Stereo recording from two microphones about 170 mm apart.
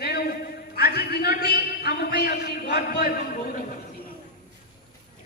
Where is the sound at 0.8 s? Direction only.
70° left (ahead or behind).